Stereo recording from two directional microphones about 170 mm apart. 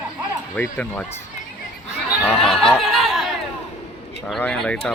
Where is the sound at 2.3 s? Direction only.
Centre (ahead or behind).